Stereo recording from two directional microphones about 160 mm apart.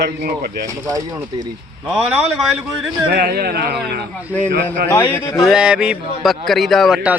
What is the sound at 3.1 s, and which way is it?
Speech, 75° right (ahead or behind).